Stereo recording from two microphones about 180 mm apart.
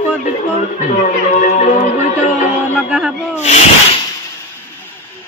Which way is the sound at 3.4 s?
40° left (ahead or behind).